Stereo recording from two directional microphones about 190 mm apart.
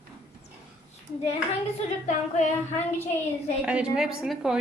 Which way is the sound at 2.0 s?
40° left (ahead or behind).